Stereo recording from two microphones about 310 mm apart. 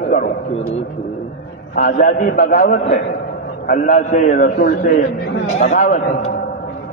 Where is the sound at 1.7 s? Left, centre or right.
Left.